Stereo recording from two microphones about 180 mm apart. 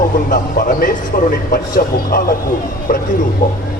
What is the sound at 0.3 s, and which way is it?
Speech, 50° left (ahead or behind).